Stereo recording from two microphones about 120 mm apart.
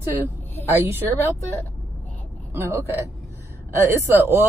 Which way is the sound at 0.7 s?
20° right (ahead or behind).